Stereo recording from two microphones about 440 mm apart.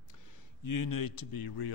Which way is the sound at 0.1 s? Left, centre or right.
Left.